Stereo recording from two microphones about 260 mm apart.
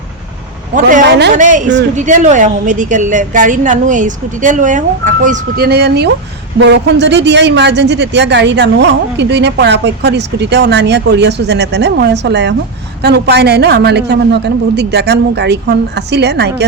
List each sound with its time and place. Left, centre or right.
0.8 s a woman's voice: right